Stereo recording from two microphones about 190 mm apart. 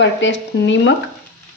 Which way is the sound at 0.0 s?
70° left (ahead or behind).